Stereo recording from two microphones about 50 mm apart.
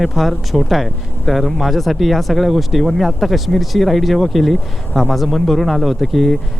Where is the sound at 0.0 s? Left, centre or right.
Centre.